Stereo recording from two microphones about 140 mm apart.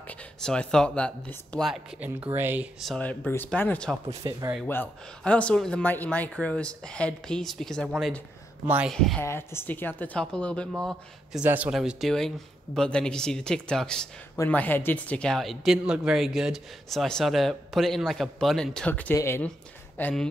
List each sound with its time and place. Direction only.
0.4 s speech: 5° left (ahead or behind)
1.7 s speech: 10° right (ahead or behind)
3.0 s speech: 10° left (ahead or behind)
4.1 s speech: 20° right (ahead or behind)
4.6 s speech: 10° left (ahead or behind)
8.6 s speech: 10° right (ahead or behind)
8.9 s speech: centre (ahead or behind)
9.2 s speech: 20° left (ahead or behind); by 11.4 s centre (ahead or behind)
11.4 s speech: 10° right (ahead or behind); by 20.2 s 10° left (ahead or behind)